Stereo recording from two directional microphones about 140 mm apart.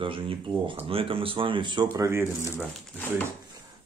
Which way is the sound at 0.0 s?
40° right (ahead or behind).